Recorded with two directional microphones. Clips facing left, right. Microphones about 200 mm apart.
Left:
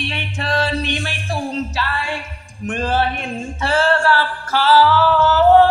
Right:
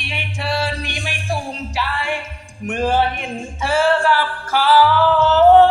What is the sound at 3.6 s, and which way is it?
Music, 10° right (ahead or behind).